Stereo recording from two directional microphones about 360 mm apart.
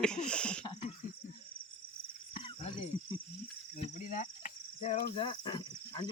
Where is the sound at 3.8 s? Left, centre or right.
Left.